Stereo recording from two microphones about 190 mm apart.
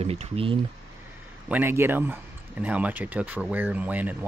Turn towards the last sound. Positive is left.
turn(degrees=-10)  # may be behind; listen again after turning